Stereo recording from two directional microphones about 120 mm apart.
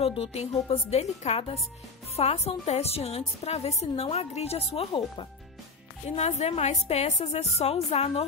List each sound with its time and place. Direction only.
0.0 s a woman's voice: 55° left (ahead or behind)
6.0 s a woman's voice: 65° left (ahead or behind)